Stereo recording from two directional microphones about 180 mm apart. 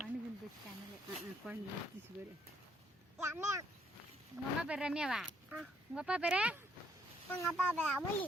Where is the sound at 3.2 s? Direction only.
15° right (ahead or behind).